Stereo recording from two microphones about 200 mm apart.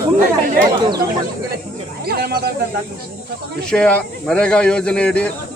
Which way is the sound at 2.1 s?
50° right (ahead or behind).